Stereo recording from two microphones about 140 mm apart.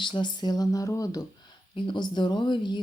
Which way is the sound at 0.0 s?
35° left (ahead or behind).